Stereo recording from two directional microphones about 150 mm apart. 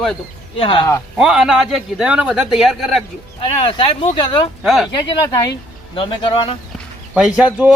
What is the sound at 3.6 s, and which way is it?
Speech, 40° left (ahead or behind).